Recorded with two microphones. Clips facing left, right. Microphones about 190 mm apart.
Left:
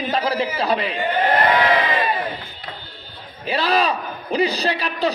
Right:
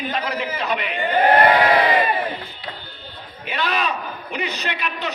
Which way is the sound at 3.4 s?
35° left (ahead or behind).